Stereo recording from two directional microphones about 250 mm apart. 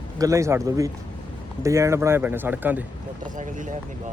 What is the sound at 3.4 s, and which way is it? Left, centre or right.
Speech, right.